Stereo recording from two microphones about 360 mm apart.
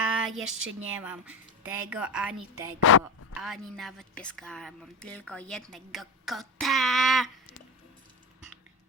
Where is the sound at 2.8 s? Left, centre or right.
Left.